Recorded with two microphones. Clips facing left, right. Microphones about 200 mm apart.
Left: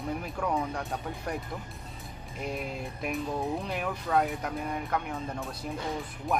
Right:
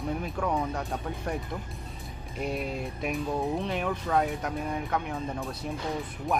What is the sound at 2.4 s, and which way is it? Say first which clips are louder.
Speech: right 3 dB; centre (ahead or behind).